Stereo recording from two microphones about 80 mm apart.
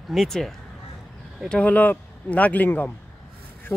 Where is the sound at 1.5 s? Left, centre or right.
Centre.